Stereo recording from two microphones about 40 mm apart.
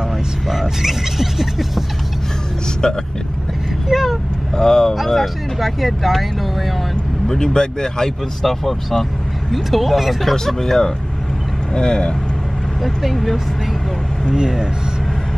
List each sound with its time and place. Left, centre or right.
0.5 s speech: centre
2.8 s speech: centre
3.9 s vehicle: centre
4.6 s speech: centre
4.9 s speech: centre
7.2 s speech: centre
10.3 s speech: centre
12.8 s speech: centre
14.3 s speech: centre